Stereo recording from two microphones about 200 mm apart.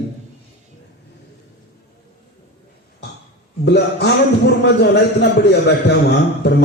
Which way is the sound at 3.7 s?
55° left (ahead or behind).